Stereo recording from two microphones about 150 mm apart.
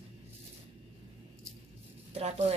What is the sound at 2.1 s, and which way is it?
Speech, 45° right (ahead or behind).